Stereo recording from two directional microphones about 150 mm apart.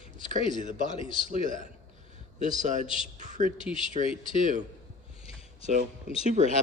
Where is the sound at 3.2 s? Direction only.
55° right (ahead or behind).